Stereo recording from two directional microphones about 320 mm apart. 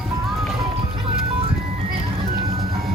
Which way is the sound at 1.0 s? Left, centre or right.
Centre.